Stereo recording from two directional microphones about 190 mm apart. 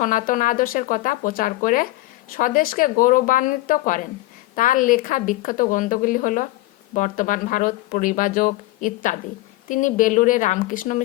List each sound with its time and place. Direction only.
0.0 s speech: 45° left (ahead or behind)